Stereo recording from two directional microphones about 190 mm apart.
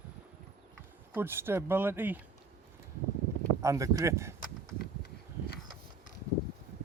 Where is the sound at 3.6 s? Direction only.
15° right (ahead or behind).